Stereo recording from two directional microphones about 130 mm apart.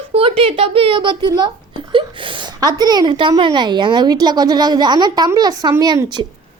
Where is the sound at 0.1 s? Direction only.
45° right (ahead or behind).